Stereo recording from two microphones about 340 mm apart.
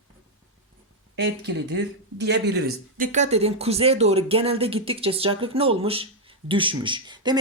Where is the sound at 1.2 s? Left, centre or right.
Right.